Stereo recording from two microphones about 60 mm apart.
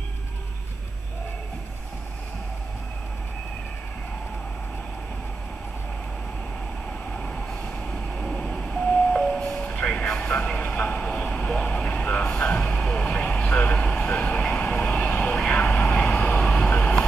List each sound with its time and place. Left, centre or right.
7.2 s vehicle: centre